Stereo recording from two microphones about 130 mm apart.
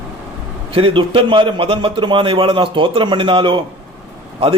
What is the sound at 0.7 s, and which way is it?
A man's voice, 45° right (ahead or behind).